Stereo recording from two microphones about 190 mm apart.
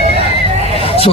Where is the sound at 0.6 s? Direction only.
30° left (ahead or behind).